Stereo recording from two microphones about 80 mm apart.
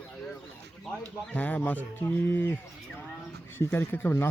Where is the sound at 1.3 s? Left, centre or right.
Centre.